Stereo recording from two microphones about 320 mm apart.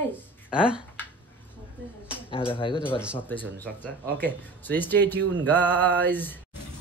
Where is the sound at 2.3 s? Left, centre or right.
Centre.